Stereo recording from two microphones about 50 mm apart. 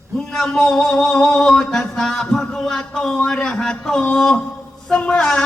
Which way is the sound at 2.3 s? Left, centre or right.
Centre.